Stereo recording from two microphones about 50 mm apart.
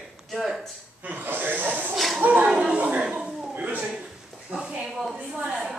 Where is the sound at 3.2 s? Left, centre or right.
Centre.